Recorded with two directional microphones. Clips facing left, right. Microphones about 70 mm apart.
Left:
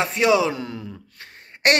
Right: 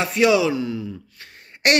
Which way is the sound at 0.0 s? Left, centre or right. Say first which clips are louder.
Right 1 dB; left.